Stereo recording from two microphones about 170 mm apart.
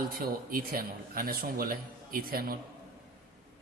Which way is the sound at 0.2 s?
60° right (ahead or behind).